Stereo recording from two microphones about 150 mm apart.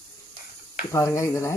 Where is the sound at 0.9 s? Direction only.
20° left (ahead or behind).